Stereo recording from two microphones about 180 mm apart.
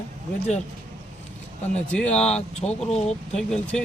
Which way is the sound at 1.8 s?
5° left (ahead or behind).